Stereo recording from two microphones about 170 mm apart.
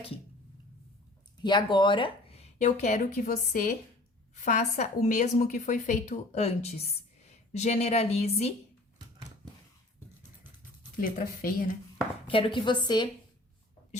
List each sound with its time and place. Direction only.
1.4 s a woman's voice: 25° left (ahead or behind)
11.0 s speech: 55° left (ahead or behind)
12.3 s a woman's voice: 30° left (ahead or behind)